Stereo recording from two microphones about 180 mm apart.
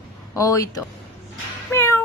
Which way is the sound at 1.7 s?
15° left (ahead or behind).